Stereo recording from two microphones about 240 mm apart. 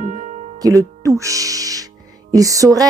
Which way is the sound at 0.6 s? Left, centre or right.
Centre.